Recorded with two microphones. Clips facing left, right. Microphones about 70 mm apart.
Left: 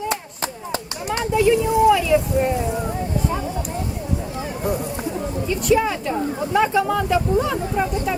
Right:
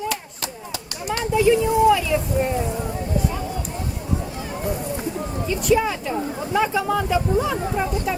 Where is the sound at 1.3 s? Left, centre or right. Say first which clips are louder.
Even; centre.